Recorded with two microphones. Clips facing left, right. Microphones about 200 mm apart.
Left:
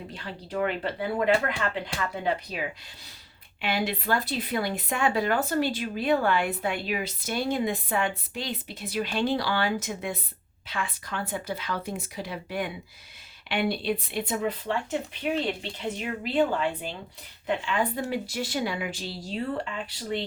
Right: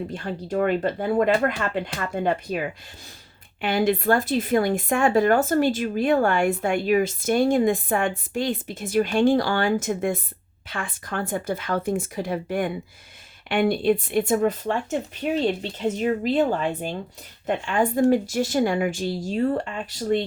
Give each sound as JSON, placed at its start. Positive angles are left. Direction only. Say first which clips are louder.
{"t": 0.1, "sound": "speech", "louder": "right 7 dB", "side_deg": -45}